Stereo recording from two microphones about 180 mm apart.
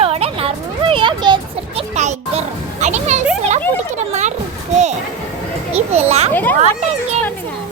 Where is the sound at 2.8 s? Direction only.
40° right (ahead or behind).